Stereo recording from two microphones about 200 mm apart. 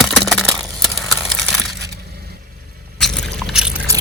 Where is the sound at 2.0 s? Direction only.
50° right (ahead or behind).